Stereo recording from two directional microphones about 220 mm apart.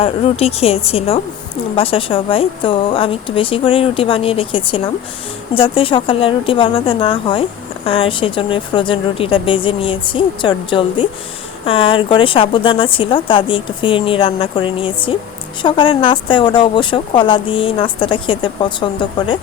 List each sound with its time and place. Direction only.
0.0 s speech: 25° left (ahead or behind)